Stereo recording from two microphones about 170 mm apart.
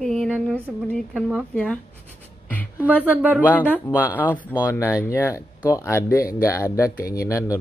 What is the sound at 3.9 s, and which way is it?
Speech, 10° right (ahead or behind).